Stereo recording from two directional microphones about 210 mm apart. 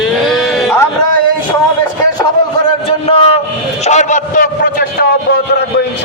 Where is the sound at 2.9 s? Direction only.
25° left (ahead or behind); by 4.8 s 40° left (ahead or behind).